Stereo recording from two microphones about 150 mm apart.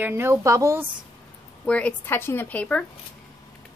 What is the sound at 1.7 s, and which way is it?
A woman's voice, 10° left (ahead or behind).